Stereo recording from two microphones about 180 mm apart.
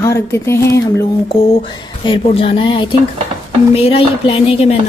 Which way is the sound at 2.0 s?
30° left (ahead or behind).